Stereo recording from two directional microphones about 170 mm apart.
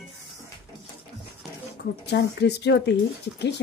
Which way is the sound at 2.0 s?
80° left.